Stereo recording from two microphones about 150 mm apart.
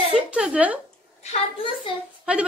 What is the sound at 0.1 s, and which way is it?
Speech, 5° right (ahead or behind).